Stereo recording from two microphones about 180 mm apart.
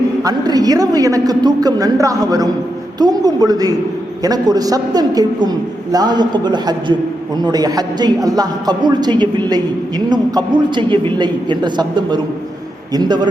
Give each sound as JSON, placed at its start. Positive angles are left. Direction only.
{"t": 0.2, "sound": "a man's voice", "side_deg": -20}